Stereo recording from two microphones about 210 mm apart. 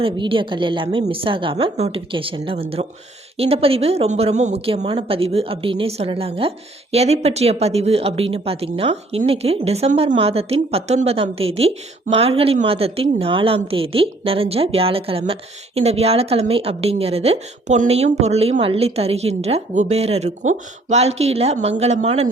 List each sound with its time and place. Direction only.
0.0 s a man's voice: 25° right (ahead or behind)